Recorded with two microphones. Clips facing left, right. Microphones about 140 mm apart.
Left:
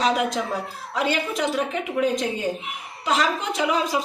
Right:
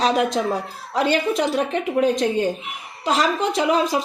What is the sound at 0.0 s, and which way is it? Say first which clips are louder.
A woman's voice: right 3 dB; 35° right (ahead or behind).